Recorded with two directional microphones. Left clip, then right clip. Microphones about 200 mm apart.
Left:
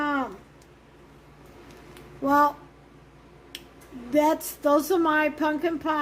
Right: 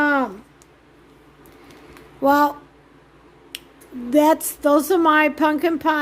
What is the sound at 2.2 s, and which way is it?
Speech, 45° right (ahead or behind).